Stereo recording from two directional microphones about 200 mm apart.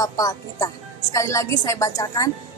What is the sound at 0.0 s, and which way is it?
A woman's voice, 20° left (ahead or behind).